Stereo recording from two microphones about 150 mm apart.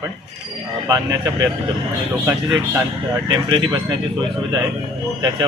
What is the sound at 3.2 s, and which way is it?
Speech, 30° right (ahead or behind).